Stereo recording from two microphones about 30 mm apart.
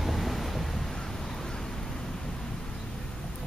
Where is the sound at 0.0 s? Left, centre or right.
Centre.